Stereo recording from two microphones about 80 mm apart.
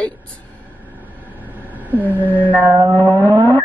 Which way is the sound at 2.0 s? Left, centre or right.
Left.